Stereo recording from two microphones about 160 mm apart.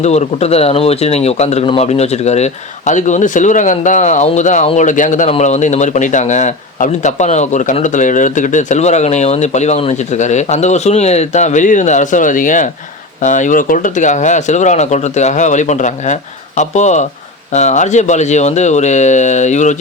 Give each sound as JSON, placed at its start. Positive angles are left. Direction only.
{"t": 0.0, "sound": "speech", "side_deg": 45}